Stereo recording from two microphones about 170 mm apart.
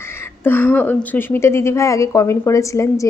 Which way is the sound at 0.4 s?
10° left (ahead or behind).